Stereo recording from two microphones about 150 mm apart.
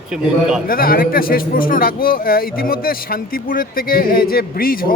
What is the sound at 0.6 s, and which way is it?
Speech, 75° left (ahead or behind).